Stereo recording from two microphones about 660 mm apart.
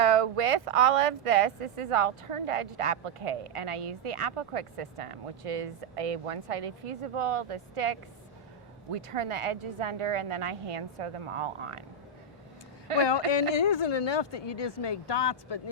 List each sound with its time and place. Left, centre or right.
0.0 s speech: right
13.0 s speech: left